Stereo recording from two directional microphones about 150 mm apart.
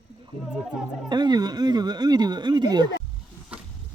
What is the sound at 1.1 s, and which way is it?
Speech, 30° right (ahead or behind).